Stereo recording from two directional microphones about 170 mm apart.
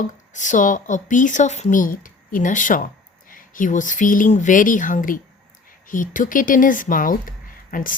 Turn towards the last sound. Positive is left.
turn(degrees=55)  # may be behind; listen again after turning